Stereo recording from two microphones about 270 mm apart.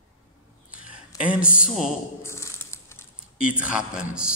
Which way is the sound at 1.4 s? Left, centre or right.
Left.